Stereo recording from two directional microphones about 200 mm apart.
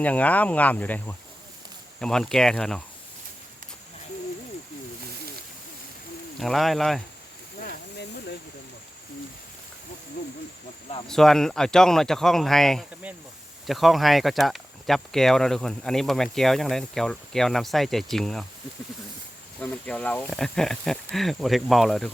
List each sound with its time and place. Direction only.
0.0 s speech: 5° left (ahead or behind)
6.4 s speech: centre (ahead or behind)
7.6 s hiss: 55° left (ahead or behind)
11.1 s speech: centre (ahead or behind)
19.8 s speech: 5° left (ahead or behind)